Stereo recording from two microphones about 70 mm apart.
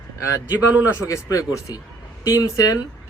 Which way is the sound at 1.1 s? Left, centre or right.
Left.